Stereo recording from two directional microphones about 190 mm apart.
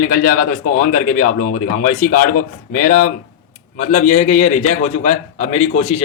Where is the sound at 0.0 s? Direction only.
45° left (ahead or behind).